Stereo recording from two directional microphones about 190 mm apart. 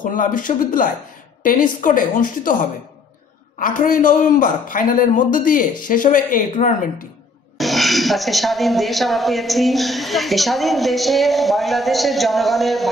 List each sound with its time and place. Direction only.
0.0 s a man's voice: 45° left (ahead or behind)
3.5 s a man's voice: 45° left (ahead or behind)
7.5 s speech: centre (ahead or behind)